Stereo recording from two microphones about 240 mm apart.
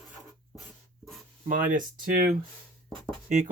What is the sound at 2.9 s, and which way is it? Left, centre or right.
Speech, centre.